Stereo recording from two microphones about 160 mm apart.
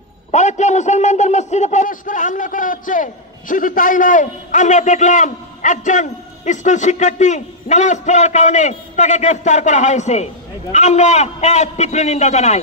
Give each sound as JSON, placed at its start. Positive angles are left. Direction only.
{"t": 0.3, "sound": "a man's voice", "side_deg": 45}